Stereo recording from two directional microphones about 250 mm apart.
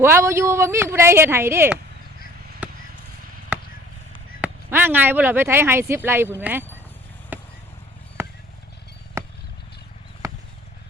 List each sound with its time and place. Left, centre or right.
0.0 s speech: centre
2.6 s chop: centre
4.4 s speech: centre
7.3 s vehicle: centre
9.2 s wild animals: centre